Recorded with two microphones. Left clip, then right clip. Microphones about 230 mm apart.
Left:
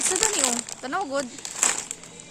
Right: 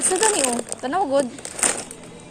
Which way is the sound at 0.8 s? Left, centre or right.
Centre.